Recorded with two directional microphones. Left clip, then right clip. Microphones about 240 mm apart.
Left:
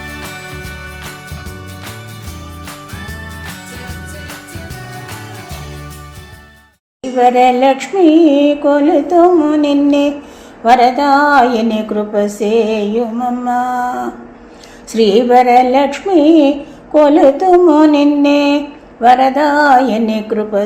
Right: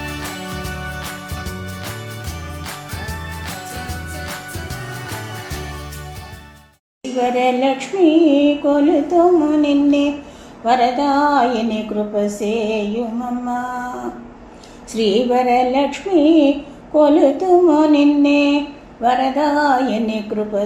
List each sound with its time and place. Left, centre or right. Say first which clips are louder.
7.2 s music: left 8 dB; left
14.9 s music: left 7 dB; left